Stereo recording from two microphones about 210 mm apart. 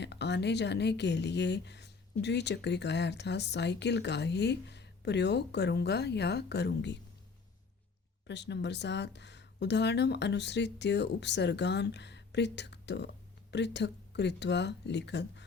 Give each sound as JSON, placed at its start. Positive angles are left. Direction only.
{"t": 0.0, "sound": "a woman's voice", "side_deg": 55}
{"t": 8.3, "sound": "a woman's voice", "side_deg": 55}